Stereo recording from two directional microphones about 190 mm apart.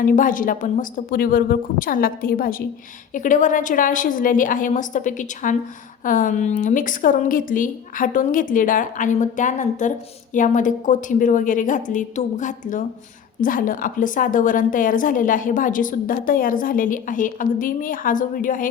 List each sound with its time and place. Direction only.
0.0 s a woman's voice: 45° left (ahead or behind)